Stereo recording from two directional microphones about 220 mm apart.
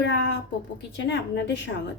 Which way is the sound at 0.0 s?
50° left (ahead or behind).